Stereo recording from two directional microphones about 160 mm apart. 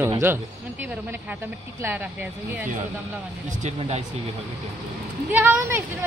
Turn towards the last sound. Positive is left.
turn(degrees=-15)  # may be behind; listen again after turning